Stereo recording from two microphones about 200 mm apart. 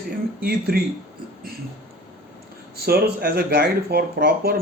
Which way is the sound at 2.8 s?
50° right (ahead or behind).